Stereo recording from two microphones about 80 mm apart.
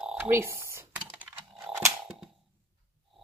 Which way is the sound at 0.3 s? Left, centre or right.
Right.